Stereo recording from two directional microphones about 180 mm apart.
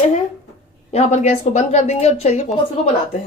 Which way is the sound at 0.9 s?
35° left (ahead or behind).